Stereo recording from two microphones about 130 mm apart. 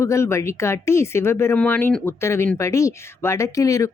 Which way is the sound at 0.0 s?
20° left (ahead or behind).